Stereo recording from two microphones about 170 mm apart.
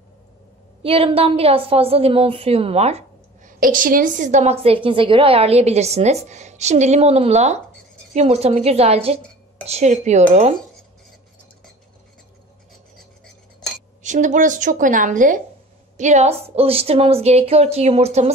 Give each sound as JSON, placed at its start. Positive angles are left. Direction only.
{"t": 0.8, "sound": "a woman's voice", "side_deg": -35}
{"t": 3.4, "sound": "a woman's voice", "side_deg": -55}
{"t": 14.0, "sound": "a woman's voice", "side_deg": -45}